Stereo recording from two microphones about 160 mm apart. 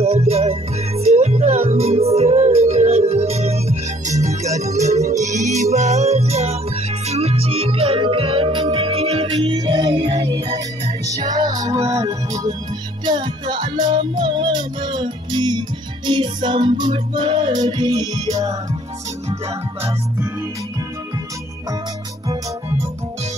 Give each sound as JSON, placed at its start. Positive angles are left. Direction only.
{"t": 0.0, "sound": "music", "side_deg": -40}